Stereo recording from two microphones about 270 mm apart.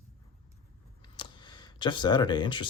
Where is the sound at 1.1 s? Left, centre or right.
Centre.